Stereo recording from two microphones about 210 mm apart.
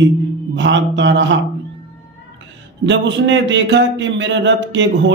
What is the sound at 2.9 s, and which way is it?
A man's voice, 60° right (ahead or behind).